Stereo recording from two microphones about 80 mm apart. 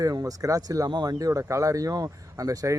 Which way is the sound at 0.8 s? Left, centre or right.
Right.